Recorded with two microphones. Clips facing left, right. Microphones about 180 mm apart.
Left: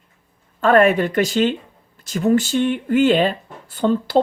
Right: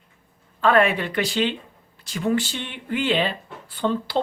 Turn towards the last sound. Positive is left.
turn(degrees=45)  # may be behind; listen again after turning